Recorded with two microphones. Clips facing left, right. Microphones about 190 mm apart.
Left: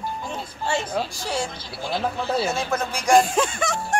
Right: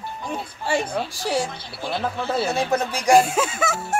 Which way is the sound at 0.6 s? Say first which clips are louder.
Right 1 dB; 15° right (ahead or behind).